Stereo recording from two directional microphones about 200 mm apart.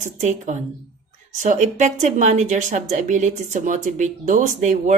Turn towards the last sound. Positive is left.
turn(degrees=-35)  # may be behind; listen again after turning